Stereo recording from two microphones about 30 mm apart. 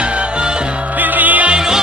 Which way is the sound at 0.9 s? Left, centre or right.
Right.